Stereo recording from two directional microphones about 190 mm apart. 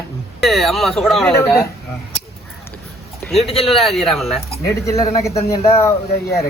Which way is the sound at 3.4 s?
30° left (ahead or behind).